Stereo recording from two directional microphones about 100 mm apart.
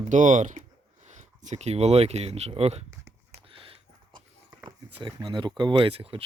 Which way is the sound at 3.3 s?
70° right (ahead or behind).